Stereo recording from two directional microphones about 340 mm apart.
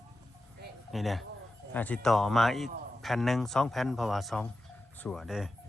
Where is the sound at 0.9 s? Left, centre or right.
Centre.